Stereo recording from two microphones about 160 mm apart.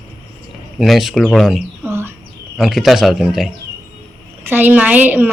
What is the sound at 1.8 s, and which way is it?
Speech, 15° right (ahead or behind).